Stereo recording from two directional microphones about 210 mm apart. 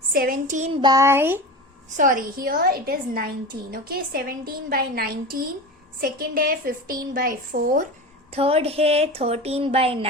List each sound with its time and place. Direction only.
0.1 s child singing: 45° right (ahead or behind)
0.8 s a sound: 15° right (ahead or behind)
2.0 s a woman's voice: 40° right (ahead or behind)
8.3 s a woman's voice: 30° right (ahead or behind)